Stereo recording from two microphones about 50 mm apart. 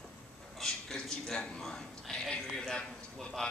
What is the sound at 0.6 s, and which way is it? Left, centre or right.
A man's voice, centre.